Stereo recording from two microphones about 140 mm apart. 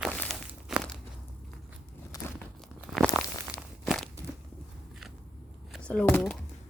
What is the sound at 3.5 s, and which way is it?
Crumpling, 20° left (ahead or behind).